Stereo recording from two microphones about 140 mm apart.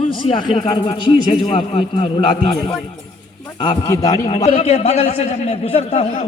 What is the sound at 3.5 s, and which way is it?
Speech, 35° left (ahead or behind).